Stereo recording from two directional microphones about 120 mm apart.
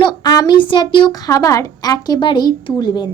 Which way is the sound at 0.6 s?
40° left (ahead or behind).